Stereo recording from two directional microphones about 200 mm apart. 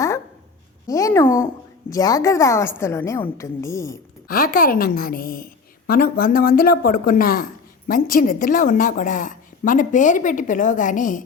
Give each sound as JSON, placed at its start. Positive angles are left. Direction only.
{"t": 0.9, "sound": "a woman's voice", "side_deg": 15}
{"t": 4.3, "sound": "a woman's voice", "side_deg": 45}